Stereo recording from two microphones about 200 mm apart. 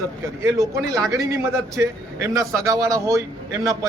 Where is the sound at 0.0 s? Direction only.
15° right (ahead or behind).